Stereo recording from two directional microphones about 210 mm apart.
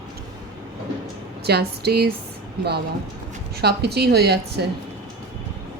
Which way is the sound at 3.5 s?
50° right (ahead or behind).